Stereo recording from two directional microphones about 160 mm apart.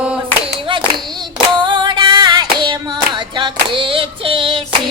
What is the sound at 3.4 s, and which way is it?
Clapping, 30° right (ahead or behind).